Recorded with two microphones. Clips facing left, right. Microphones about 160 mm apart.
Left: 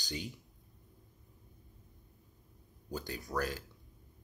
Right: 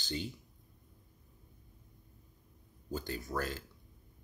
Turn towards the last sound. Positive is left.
turn(degrees=10)  # may be behind; listen again after turning